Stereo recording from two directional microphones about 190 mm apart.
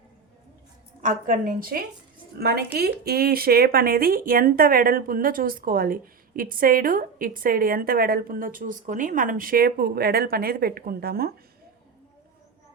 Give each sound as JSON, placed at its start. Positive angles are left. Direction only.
{"t": 1.0, "sound": "speech", "side_deg": -45}